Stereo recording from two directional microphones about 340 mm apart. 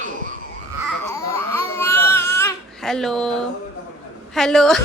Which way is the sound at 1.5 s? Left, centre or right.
Centre.